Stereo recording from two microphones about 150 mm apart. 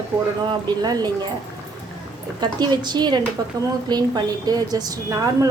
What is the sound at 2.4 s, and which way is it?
A woman's voice, 25° right (ahead or behind).